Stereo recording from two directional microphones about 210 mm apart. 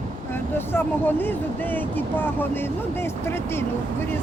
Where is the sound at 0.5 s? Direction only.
10° left (ahead or behind).